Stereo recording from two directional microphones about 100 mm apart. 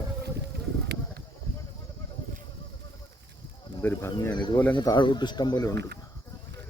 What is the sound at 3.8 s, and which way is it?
Speech, 20° left (ahead or behind).